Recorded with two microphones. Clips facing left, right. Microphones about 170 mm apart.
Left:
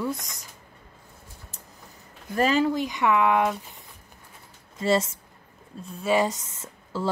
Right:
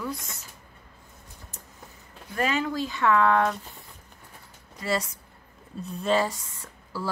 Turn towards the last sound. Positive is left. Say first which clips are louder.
# left 4 dB
turn(degrees=20)  # may be behind; listen again after turning